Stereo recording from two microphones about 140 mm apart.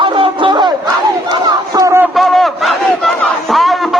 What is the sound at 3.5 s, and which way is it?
Music, centre (ahead or behind).